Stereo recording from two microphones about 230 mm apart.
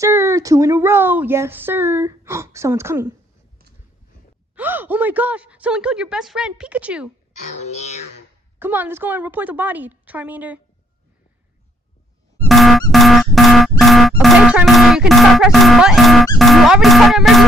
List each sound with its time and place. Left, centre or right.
0.0 s speech: centre
4.6 s a woman's voice: centre
7.5 s a sound: left
8.5 s speech: centre
12.4 s music: centre
16.3 s a woman's voice: centre